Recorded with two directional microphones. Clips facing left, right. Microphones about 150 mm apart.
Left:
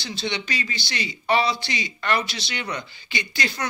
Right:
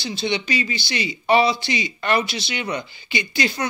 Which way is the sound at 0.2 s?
20° right (ahead or behind).